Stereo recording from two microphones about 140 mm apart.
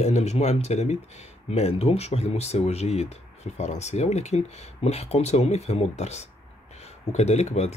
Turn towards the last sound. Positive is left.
turn(degrees=50)  # may be behind; listen again after turning